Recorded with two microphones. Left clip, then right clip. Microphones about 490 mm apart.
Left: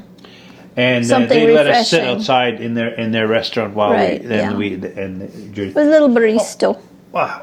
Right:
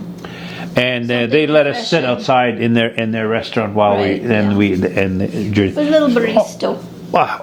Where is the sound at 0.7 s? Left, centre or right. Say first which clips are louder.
Left 1 dB; right.